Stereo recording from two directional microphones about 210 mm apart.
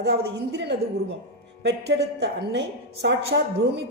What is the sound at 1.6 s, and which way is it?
A woman's voice, 55° right (ahead or behind).